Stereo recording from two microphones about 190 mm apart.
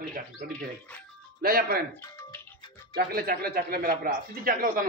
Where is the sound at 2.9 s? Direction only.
50° right (ahead or behind).